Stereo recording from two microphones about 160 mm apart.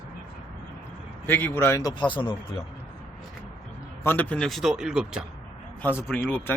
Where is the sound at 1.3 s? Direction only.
15° left (ahead or behind).